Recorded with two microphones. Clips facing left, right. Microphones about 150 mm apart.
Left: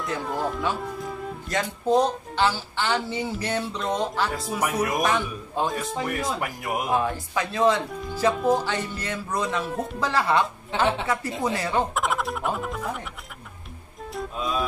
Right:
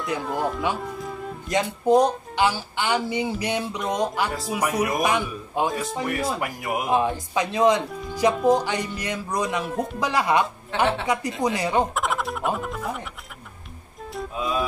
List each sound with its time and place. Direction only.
0.0 s speech: centre (ahead or behind)
0.7 s music: centre (ahead or behind)
1.5 s speech: 15° right (ahead or behind)
4.3 s speech: centre (ahead or behind)
5.7 s speech: centre (ahead or behind)
6.9 s speech: 20° right (ahead or behind)
8.4 s speech: centre (ahead or behind)
8.6 s speech: 15° right (ahead or behind)
11.9 s speech: centre (ahead or behind)
14.1 s music: centre (ahead or behind)